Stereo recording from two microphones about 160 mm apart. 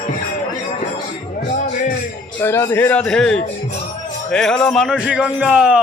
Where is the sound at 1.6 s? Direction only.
50° left (ahead or behind).